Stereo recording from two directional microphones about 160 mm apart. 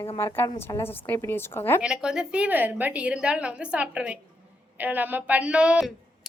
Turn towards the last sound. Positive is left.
turn(degrees=-5)  # may be behind; listen again after turning